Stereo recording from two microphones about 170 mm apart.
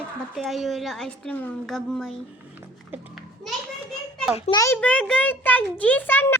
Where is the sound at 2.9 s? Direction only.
Centre (ahead or behind).